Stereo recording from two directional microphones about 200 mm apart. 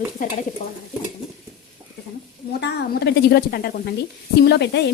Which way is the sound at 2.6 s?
55° left (ahead or behind).